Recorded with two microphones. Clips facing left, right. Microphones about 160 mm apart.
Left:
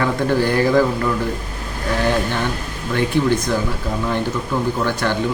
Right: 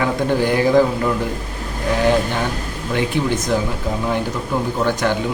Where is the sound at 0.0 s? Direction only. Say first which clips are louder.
Even; 15° right (ahead or behind).